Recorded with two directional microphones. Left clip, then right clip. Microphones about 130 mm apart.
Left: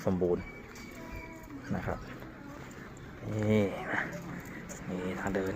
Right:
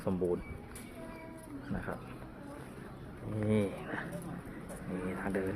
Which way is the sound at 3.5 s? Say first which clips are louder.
Left 4 dB; 10° left (ahead or behind).